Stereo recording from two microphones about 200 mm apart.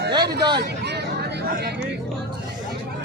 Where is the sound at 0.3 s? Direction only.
55° right (ahead or behind).